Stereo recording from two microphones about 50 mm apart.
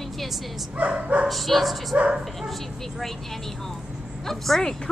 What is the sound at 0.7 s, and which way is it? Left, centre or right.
Speech, right.